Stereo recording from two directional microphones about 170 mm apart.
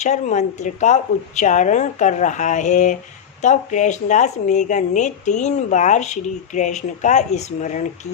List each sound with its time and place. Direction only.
0.0 s speech: 45° left (ahead or behind)